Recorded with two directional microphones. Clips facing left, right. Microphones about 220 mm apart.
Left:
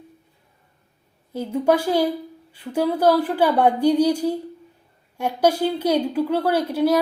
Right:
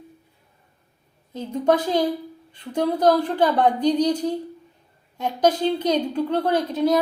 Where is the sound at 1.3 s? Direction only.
10° left (ahead or behind).